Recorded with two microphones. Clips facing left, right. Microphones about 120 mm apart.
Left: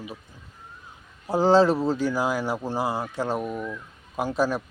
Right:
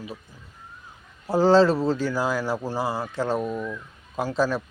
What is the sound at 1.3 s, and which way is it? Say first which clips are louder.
Speech: right 1 dB; 15° left (ahead or behind).